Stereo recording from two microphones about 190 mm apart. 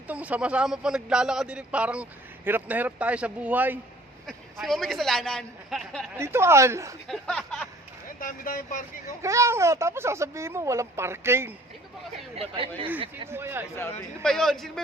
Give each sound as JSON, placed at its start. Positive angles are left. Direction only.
{"t": 0.1, "sound": "speech", "side_deg": -5}
{"t": 6.1, "sound": "speech", "side_deg": -15}
{"t": 7.1, "sound": "speech", "side_deg": 5}
{"t": 8.2, "sound": "speech", "side_deg": 45}
{"t": 9.2, "sound": "speech", "side_deg": -15}
{"t": 12.4, "sound": "speech", "side_deg": -30}
{"t": 13.2, "sound": "speech", "side_deg": -10}
{"t": 14.3, "sound": "speech", "side_deg": 0}